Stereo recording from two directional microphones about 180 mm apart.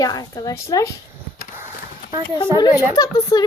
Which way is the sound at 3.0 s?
20° left (ahead or behind).